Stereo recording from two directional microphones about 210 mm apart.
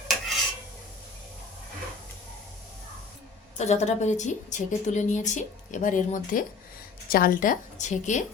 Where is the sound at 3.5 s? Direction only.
30° left (ahead or behind).